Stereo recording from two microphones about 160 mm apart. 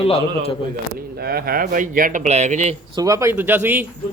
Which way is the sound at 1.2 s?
75° right (ahead or behind).